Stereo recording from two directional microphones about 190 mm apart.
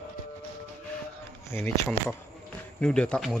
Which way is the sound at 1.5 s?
10° left (ahead or behind).